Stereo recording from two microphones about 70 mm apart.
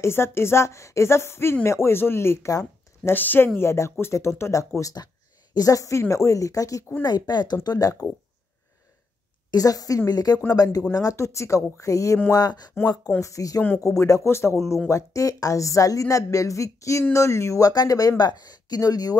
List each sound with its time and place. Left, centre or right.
0.0 s speech: left
3.5 s speech: left
7.0 s speech: left
9.5 s speech: left
12.3 s speech: left
13.2 s speech: left